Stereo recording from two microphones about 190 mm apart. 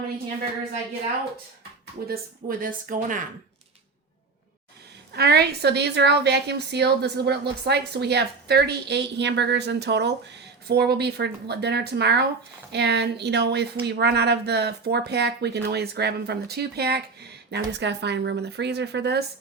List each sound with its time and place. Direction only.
2.0 s a woman's voice: 45° right (ahead or behind)
5.1 s speech: 60° right (ahead or behind)